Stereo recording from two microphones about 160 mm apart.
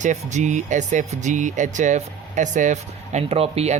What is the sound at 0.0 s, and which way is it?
Speech, 50° right (ahead or behind).